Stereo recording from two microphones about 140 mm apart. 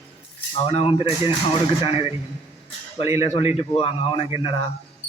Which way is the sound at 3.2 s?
45° left (ahead or behind).